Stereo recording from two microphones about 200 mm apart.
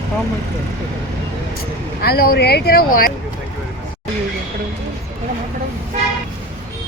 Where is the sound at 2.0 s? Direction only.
50° left (ahead or behind).